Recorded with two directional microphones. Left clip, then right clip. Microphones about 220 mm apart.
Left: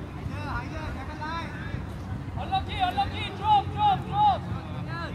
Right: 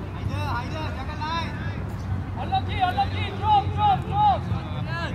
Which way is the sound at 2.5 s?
45° left (ahead or behind).